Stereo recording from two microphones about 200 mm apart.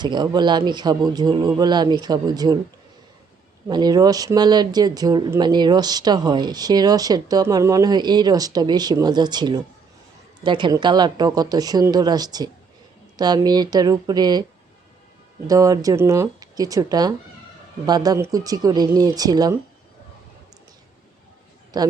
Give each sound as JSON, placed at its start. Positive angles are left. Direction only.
{"t": 0.0, "sound": "speech", "side_deg": -20}
{"t": 3.7, "sound": "speech", "side_deg": -20}
{"t": 15.4, "sound": "speech", "side_deg": -15}
{"t": 21.7, "sound": "a man's voice", "side_deg": -20}